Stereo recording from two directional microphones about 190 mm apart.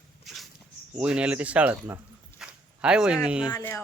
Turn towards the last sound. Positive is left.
turn(degrees=15)  # may be behind; listen again after turning